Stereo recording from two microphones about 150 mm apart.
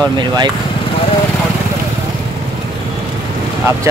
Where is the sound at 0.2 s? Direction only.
30° right (ahead or behind).